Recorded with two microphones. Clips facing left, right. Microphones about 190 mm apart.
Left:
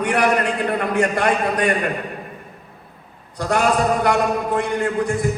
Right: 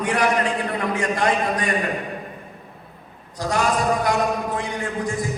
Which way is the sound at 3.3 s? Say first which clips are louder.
Left 3 dB; 60° left (ahead or behind).